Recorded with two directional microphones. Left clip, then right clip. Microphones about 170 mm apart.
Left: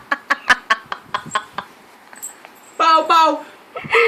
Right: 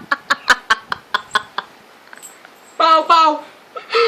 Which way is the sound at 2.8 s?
Centre (ahead or behind).